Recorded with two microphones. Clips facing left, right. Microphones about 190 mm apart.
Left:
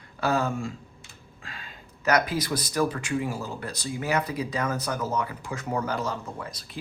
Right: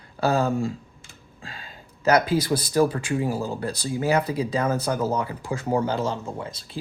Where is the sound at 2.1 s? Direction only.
30° right (ahead or behind).